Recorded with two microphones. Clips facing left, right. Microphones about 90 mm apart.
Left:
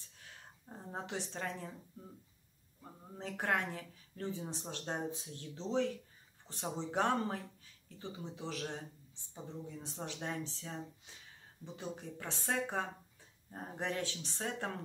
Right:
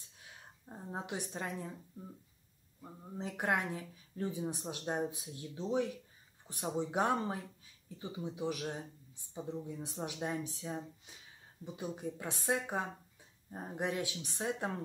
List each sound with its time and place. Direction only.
0.2 s speech: 15° right (ahead or behind)
2.8 s speech: 15° right (ahead or behind)